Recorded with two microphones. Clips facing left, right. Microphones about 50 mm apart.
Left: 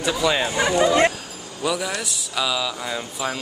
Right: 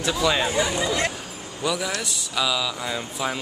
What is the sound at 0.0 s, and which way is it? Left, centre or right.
Speech, centre.